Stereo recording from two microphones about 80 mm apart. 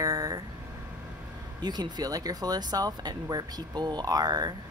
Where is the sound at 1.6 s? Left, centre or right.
Right.